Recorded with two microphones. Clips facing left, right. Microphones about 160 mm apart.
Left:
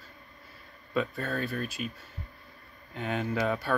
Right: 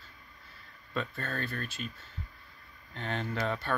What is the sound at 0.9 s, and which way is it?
Speech, 10° left (ahead or behind).